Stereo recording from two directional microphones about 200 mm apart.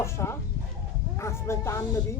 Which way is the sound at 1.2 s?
15° left (ahead or behind).